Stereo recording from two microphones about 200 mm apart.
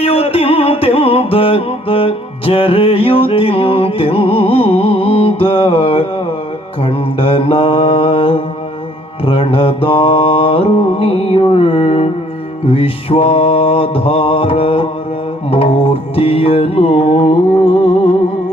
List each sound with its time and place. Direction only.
0.0 s music: 30° left (ahead or behind)
6.8 s mantra: 30° left (ahead or behind)
15.4 s music: 30° left (ahead or behind)